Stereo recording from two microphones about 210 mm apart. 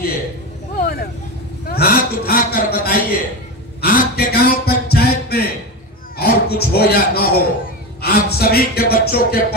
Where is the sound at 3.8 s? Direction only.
45° left (ahead or behind).